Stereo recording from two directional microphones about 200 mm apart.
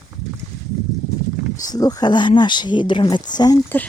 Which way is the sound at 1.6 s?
20° left (ahead or behind).